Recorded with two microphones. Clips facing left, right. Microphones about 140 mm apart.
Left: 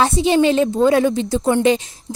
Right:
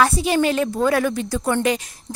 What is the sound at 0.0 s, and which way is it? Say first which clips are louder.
A woman's voice: left 3 dB; 25° left (ahead or behind).